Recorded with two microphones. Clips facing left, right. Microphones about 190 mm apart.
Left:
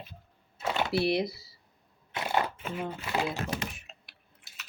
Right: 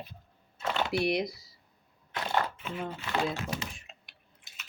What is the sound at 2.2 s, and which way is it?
Shuffling cards, 15° left (ahead or behind).